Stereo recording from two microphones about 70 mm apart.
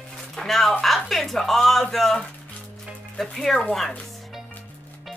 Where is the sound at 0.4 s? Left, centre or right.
Centre.